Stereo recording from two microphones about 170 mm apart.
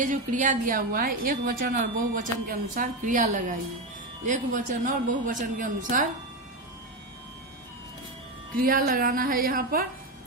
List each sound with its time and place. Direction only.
0.0 s a woman's voice: 50° right (ahead or behind)
8.5 s speech: 60° right (ahead or behind)